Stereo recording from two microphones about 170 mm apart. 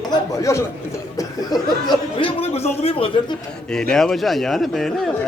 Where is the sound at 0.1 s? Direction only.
20° left (ahead or behind).